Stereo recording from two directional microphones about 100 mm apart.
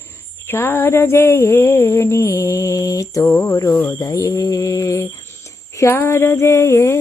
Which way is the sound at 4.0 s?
35° left (ahead or behind).